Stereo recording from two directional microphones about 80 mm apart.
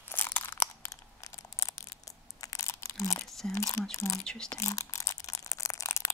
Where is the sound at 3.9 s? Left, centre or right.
Left.